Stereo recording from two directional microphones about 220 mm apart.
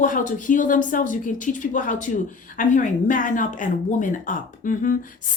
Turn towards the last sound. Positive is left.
turn(degrees=40)  # may be behind; listen again after turning